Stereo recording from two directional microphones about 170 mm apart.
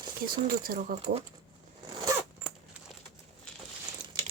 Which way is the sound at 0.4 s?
60° right (ahead or behind).